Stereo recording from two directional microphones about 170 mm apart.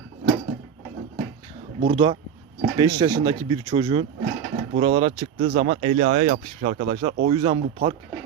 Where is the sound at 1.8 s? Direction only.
30° right (ahead or behind).